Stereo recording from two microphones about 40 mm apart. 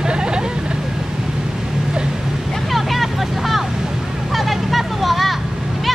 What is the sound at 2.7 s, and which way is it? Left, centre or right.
Vehicle, centre.